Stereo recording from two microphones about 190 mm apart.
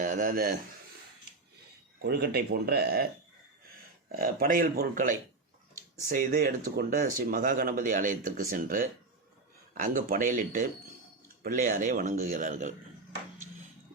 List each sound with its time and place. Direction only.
0.0 s speech: 45° right (ahead or behind)
2.0 s speech: 55° right (ahead or behind)
4.1 s speech: 50° right (ahead or behind)